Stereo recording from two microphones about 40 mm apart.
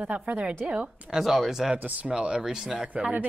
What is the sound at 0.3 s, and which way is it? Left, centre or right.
Speech, right.